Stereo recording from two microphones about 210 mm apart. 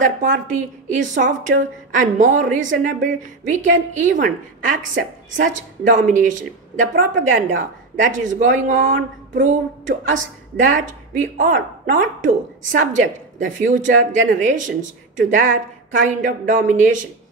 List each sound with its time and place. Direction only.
0.0 s a woman's voice: 40° right (ahead or behind)